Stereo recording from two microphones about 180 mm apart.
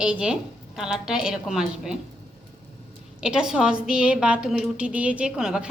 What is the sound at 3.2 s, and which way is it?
A woman's voice, 5° right (ahead or behind).